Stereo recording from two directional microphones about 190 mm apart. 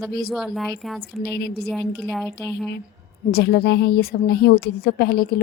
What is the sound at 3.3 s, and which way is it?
A woman's voice, 60° left (ahead or behind).